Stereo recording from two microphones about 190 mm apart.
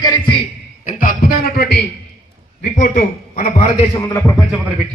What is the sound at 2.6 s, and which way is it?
A man's voice, 45° left (ahead or behind).